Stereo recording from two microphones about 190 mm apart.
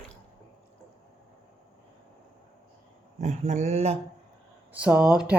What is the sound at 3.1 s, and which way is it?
Speech, 35° right (ahead or behind).